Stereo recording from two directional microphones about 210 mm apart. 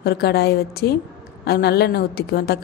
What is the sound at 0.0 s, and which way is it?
A woman's voice, 50° left (ahead or behind).